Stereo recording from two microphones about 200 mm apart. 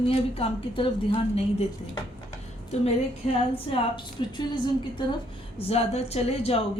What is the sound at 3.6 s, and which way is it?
A woman's voice, 25° left (ahead or behind).